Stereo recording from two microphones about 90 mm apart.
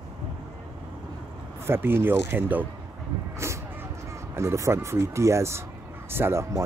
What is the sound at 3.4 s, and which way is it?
Vehicle, 30° right (ahead or behind).